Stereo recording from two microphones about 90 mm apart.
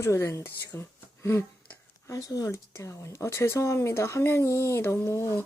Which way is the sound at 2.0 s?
40° left (ahead or behind).